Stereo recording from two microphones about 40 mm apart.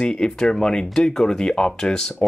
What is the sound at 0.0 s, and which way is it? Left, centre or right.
Speech, centre.